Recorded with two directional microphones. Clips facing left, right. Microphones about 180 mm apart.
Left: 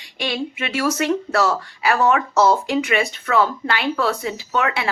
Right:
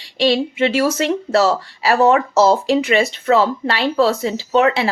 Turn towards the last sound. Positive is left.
turn(degrees=-25)  # may be behind; listen again after turning